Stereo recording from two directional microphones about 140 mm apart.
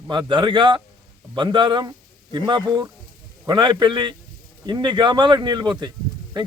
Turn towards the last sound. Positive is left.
turn(degrees=-30)  # may be behind; listen again after turning